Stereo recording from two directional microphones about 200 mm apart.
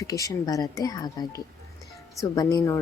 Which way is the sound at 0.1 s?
15° left (ahead or behind).